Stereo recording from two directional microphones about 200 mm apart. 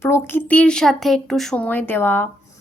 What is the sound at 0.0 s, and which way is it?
Speech, 10° left (ahead or behind).